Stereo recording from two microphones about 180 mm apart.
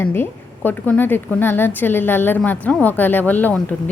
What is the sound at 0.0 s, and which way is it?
A woman's voice, 10° left (ahead or behind).